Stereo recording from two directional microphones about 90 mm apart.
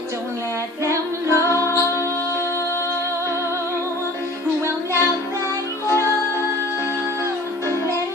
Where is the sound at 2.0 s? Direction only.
35° right (ahead or behind).